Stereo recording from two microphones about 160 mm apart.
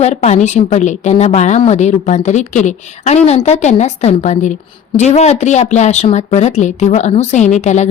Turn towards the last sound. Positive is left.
turn(degrees=45)  # may be behind; listen again after turning